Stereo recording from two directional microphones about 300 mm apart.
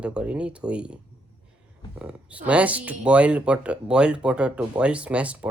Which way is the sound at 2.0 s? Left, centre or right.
Centre.